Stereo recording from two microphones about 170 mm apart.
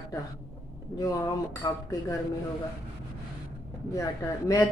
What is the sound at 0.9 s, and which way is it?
Speech, 20° left (ahead or behind).